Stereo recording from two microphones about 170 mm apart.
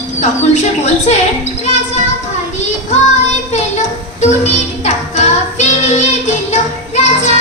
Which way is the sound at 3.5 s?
40° left (ahead or behind).